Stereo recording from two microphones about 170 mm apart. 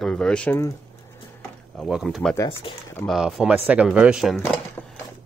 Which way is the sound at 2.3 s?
15° left (ahead or behind).